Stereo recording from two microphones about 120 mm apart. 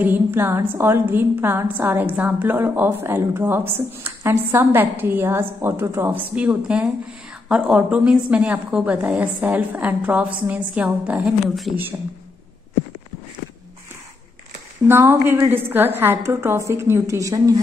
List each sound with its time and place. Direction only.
0.0 s a woman's voice: 15° right (ahead or behind)
14.9 s a woman's voice: 20° right (ahead or behind)